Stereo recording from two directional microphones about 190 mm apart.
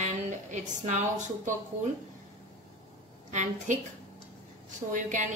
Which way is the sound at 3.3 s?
40° right (ahead or behind).